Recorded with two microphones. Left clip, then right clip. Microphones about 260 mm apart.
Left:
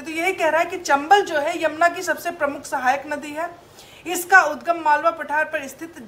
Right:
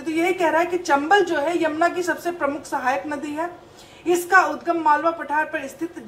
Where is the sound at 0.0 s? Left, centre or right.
Left.